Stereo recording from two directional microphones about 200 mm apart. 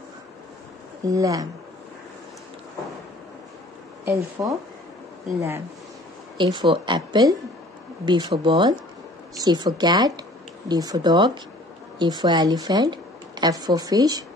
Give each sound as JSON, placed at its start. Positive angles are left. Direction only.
{"t": 1.0, "sound": "speech", "side_deg": -15}
{"t": 4.0, "sound": "speech", "side_deg": -15}
{"t": 6.3, "sound": "speech", "side_deg": -20}